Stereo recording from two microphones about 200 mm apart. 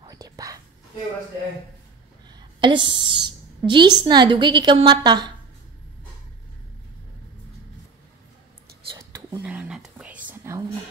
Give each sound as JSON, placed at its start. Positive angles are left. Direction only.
{"t": 0.1, "sound": "whispering", "side_deg": -20}
{"t": 2.2, "sound": "a woman's voice", "side_deg": -25}
{"t": 9.4, "sound": "whispering", "side_deg": -5}